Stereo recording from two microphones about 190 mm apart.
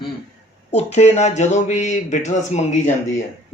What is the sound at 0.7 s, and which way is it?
Speech, 35° left (ahead or behind).